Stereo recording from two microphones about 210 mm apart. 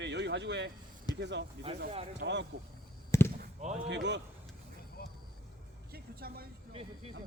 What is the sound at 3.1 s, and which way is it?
Basketball bounce, 10° left (ahead or behind).